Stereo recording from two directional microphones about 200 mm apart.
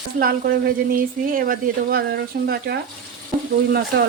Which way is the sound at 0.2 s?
50° right (ahead or behind).